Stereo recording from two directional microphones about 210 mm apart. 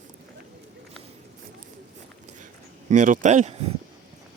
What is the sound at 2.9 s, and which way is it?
Speech, 40° right (ahead or behind).